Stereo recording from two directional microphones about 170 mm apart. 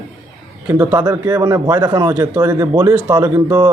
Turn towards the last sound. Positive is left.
turn(degrees=-15)  # may be behind; listen again after turning